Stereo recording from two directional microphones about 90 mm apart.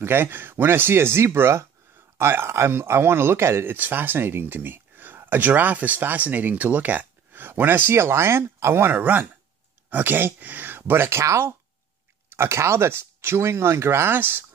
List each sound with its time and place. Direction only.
0.0 s speech: 25° right (ahead or behind)